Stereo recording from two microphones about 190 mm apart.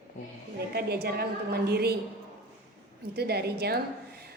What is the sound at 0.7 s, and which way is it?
A woman's voice, 55° right (ahead or behind).